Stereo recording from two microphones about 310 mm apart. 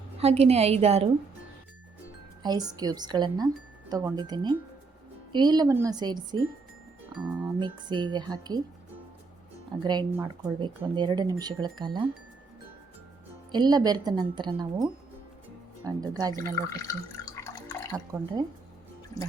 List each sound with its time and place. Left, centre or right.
0.2 s a woman's voice: centre
2.4 s speech: centre
9.8 s speech: centre
13.5 s speech: centre
16.3 s drip: centre
17.9 s speech: centre